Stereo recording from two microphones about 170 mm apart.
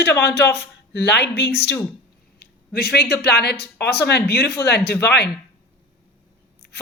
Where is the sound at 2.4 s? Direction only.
65° left (ahead or behind).